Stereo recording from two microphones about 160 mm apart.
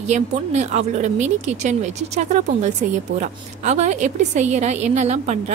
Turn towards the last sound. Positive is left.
turn(degrees=-45)  # may be behind; listen again after turning